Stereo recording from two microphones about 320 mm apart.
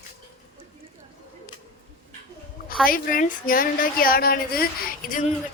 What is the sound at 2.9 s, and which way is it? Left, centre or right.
A woman's voice, left.